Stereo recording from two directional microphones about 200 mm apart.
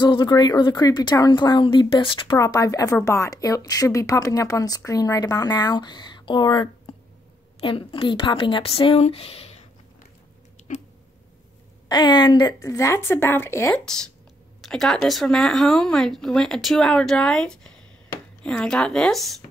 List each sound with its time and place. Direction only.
0.0 s a woman's voice: 20° left (ahead or behind)
10.7 s a sound: 40° left (ahead or behind)
11.9 s a woman's voice: 20° left (ahead or behind); by 19.3 s centre (ahead or behind)